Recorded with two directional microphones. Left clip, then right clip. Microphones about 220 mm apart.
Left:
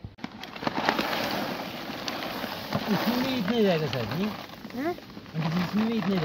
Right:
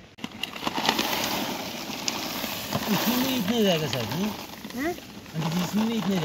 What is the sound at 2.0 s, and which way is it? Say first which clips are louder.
Boat: right 2 dB; 10° left (ahead or behind).